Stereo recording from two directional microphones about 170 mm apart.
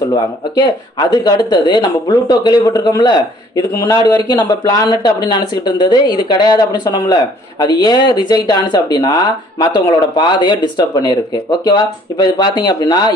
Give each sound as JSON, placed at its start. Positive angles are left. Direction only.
{"t": 0.1, "sound": "speech", "side_deg": 25}